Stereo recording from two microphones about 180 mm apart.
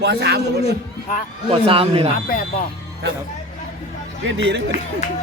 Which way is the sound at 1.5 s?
30° right (ahead or behind).